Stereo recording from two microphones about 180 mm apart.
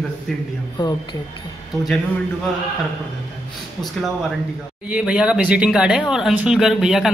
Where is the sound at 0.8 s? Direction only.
25° left (ahead or behind).